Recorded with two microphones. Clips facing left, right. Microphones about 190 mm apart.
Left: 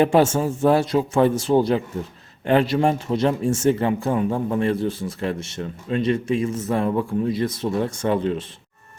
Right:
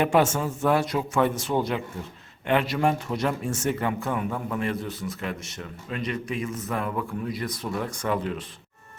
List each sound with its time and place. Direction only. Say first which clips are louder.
0.0 s a man's voice: left 5 dB; 30° left (ahead or behind)